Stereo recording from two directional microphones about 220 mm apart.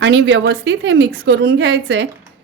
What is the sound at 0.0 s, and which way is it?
A woman's voice, 50° right (ahead or behind).